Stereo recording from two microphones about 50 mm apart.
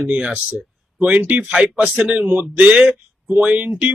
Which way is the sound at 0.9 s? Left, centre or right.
Right.